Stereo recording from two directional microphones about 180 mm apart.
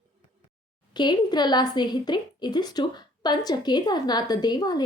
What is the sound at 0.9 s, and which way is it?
A woman's voice, 25° left (ahead or behind).